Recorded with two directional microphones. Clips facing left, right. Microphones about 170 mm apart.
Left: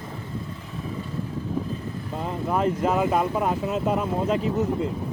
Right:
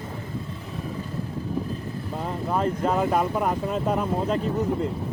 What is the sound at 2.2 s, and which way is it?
Speech, centre (ahead or behind).